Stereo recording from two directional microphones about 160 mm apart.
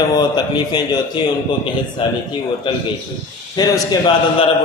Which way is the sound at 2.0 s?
30° left (ahead or behind).